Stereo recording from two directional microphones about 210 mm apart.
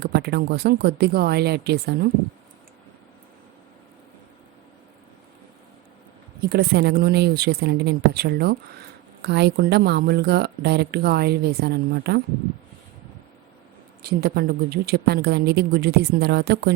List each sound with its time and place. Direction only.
0.0 s speech: 50° right (ahead or behind)
6.4 s speech: 50° right (ahead or behind)
14.0 s speech: 45° right (ahead or behind)